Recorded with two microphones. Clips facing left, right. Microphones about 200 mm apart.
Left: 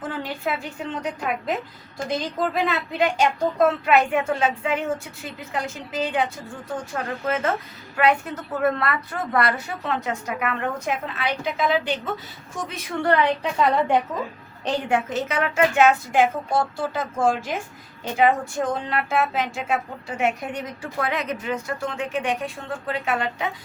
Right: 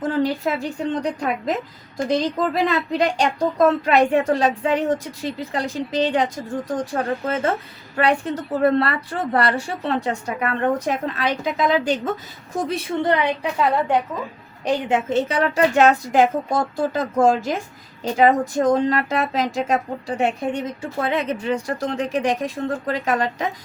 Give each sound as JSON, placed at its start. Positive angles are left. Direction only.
{"t": 0.1, "sound": "speech", "side_deg": -40}
{"t": 2.6, "sound": "a woman's voice", "side_deg": -40}
{"t": 13.6, "sound": "a woman's voice", "side_deg": 0}
{"t": 14.8, "sound": "speech", "side_deg": -25}